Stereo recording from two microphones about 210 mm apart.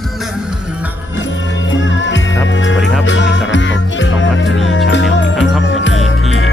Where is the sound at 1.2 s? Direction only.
60° left (ahead or behind).